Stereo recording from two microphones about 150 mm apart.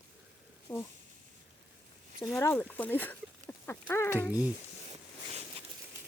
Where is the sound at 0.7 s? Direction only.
15° left (ahead or behind).